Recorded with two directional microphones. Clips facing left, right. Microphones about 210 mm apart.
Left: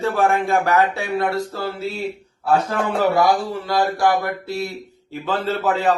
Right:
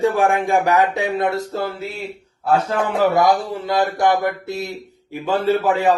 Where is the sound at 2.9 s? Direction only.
20° right (ahead or behind).